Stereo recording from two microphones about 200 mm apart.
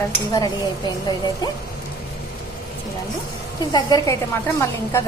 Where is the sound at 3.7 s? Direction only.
20° left (ahead or behind).